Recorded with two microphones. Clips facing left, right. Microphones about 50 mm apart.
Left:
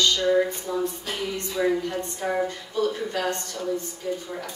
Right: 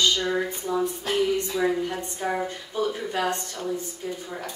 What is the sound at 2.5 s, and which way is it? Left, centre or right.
Speech, right.